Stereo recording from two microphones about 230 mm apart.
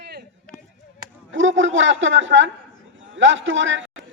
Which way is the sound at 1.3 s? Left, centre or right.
Right.